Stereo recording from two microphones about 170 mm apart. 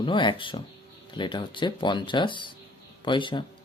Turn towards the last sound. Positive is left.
turn(degrees=30)  # may be behind; listen again after turning